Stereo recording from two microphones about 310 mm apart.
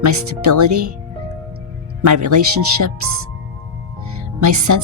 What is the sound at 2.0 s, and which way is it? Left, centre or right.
Speech, right.